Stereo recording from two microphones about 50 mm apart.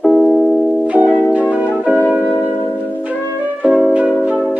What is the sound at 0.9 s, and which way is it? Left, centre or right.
Music, right.